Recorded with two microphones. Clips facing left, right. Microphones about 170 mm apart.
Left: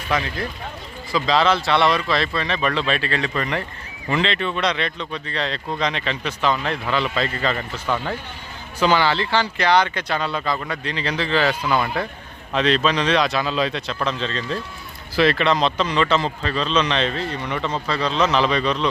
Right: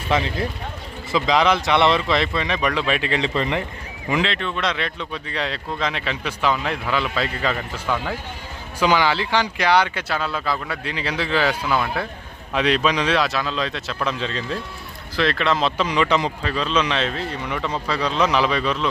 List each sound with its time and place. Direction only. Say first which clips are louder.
0.1 s speech: right 2 dB; 25° right (ahead or behind)
4.1 s speech: even; 5° right (ahead or behind)
4.4 s speech: left 2 dB; 5° left (ahead or behind)
15.1 s speech: left 3 dB; 5° left (ahead or behind)